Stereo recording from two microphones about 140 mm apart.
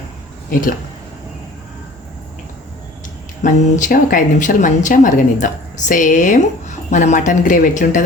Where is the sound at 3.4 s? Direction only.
65° left (ahead or behind).